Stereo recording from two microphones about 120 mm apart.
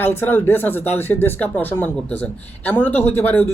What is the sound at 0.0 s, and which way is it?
A man's voice, 20° left (ahead or behind).